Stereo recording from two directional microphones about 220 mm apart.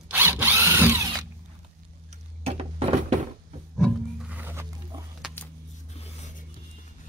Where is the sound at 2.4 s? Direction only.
25° right (ahead or behind).